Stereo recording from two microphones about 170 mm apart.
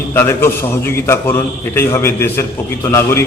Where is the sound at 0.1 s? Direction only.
15° left (ahead or behind).